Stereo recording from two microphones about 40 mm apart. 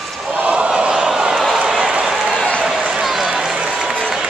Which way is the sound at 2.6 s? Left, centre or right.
Centre.